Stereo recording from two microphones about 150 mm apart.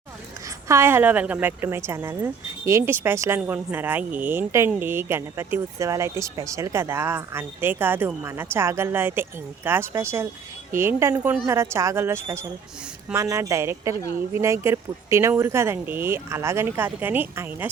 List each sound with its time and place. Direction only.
0.7 s a woman's voice: 15° right (ahead or behind)